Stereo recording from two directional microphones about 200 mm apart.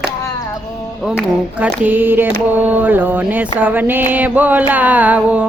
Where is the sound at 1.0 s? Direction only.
5° right (ahead or behind).